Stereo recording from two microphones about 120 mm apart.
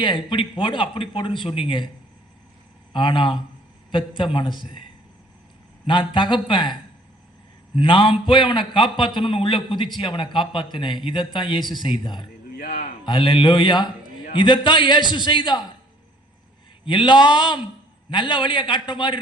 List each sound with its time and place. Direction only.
0.3 s a man's voice: 45° left (ahead or behind)
2.9 s a man's voice: 45° left (ahead or behind)
5.8 s a man's voice: 45° left (ahead or behind)
7.8 s a man's voice: 45° left (ahead or behind)
16.8 s a man's voice: 45° left (ahead or behind)